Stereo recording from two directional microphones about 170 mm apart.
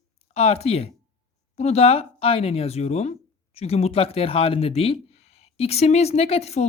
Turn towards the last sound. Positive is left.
turn(degrees=40)  # may be behind; listen again after turning